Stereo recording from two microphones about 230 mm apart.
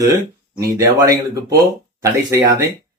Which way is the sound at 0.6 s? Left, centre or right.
Centre.